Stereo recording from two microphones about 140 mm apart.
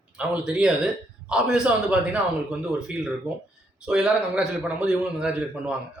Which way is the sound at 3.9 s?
5° right (ahead or behind).